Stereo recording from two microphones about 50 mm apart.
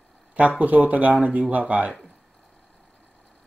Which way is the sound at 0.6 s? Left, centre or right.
Right.